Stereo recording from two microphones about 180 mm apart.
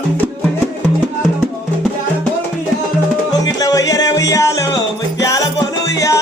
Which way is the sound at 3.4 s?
20° left (ahead or behind).